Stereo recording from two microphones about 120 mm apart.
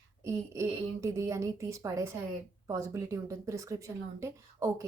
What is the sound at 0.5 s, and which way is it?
A woman's voice, 25° right (ahead or behind).